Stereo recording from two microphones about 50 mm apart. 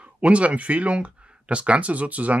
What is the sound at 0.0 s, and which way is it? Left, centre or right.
Speech, right.